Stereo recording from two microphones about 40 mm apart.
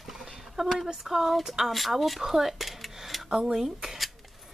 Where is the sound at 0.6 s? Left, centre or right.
Centre.